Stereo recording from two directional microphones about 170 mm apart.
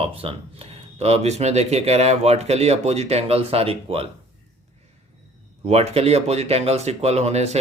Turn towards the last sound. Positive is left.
turn(degrees=-40)  # may be behind; listen again after turning